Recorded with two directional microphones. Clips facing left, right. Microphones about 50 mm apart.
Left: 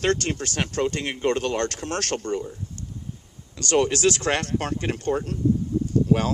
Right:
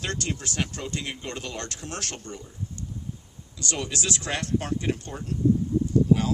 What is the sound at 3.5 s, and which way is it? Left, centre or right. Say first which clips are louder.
Speech: left 10 dB; left.